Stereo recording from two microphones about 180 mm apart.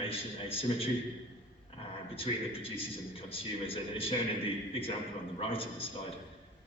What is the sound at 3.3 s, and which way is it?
Speech, 30° left (ahead or behind).